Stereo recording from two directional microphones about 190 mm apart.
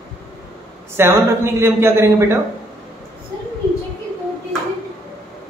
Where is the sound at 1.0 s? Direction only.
15° right (ahead or behind).